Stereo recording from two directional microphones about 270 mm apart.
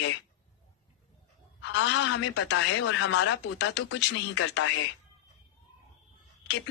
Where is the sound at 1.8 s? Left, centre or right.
Left.